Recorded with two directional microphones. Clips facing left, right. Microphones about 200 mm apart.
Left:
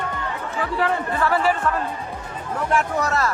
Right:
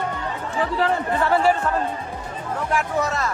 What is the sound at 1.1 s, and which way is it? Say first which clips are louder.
Chatter: right 3 dB; 25° right (ahead or behind).